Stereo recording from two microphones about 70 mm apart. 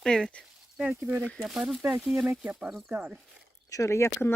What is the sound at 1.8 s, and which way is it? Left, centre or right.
Speech, right.